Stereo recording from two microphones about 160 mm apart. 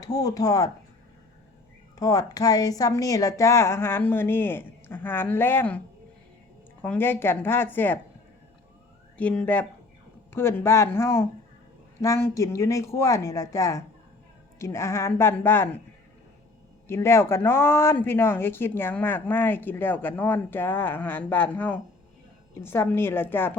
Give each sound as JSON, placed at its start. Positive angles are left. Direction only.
{"t": 0.0, "sound": "speech", "side_deg": 25}
{"t": 2.0, "sound": "speech", "side_deg": 20}
{"t": 6.8, "sound": "speech", "side_deg": 10}
{"t": 9.1, "sound": "speech", "side_deg": 5}
{"t": 16.9, "sound": "speech", "side_deg": 15}